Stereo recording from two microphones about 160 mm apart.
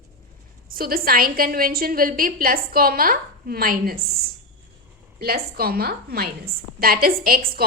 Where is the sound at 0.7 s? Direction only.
65° right (ahead or behind).